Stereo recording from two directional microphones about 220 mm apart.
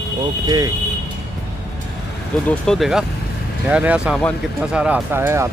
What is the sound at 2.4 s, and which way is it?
Speech, 5° left (ahead or behind).